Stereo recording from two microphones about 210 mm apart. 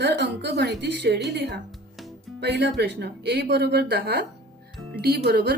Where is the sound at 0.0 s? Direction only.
55° right (ahead or behind).